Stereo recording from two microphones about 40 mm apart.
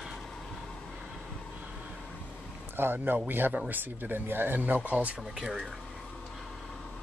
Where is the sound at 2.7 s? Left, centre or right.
Right.